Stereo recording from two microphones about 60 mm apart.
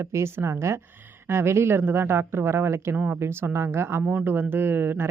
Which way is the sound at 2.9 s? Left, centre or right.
Right.